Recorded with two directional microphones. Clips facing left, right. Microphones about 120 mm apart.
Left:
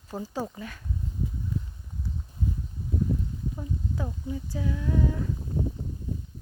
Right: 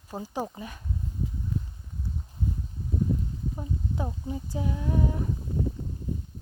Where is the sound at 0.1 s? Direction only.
15° right (ahead or behind).